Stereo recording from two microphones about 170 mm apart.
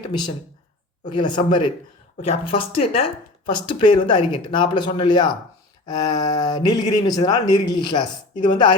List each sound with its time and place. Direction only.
0.0 s speech: 25° left (ahead or behind)